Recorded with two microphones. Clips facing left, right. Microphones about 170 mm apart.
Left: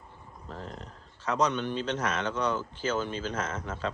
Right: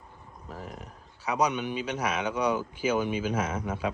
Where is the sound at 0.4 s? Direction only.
10° right (ahead or behind).